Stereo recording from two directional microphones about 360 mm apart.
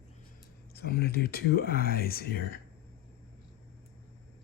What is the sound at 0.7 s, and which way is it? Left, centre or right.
Speech, left.